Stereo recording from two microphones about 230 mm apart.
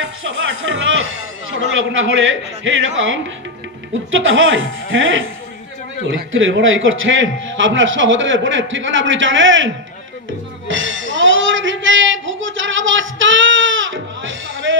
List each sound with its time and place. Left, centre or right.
0.0 s a man's voice: right
4.1 s a man's voice: right
10.7 s a sound: right